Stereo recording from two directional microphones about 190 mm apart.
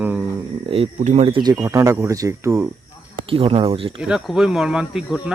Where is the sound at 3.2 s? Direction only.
30° right (ahead or behind).